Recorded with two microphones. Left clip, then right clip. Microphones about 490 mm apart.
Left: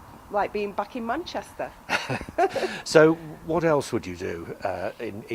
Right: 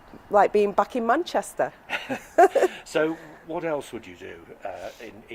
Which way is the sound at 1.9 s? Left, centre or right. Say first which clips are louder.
Left 3 dB; left.